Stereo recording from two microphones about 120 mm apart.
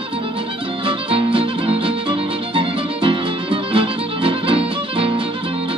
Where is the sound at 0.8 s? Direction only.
50° right (ahead or behind).